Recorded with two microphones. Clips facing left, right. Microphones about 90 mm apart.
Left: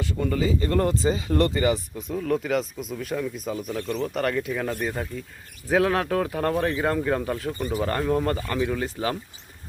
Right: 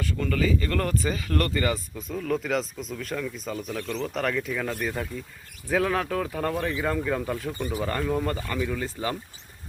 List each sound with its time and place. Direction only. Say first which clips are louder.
0.0 s speech: left 1 dB; 20° left (ahead or behind)
2.0 s speech: left 3 dB; centre (ahead or behind)
8.5 s speech: left 3 dB; 15° left (ahead or behind)